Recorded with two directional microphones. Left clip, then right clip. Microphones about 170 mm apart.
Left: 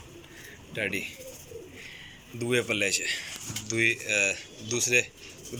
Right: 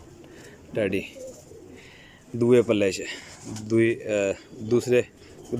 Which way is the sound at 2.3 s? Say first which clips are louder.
Right 8 dB; 50° right (ahead or behind).